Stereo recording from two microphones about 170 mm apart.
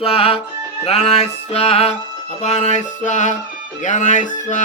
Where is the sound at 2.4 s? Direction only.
40° left (ahead or behind).